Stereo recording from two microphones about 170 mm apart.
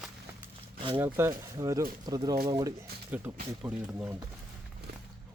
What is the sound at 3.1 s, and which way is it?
Speech, 10° right (ahead or behind).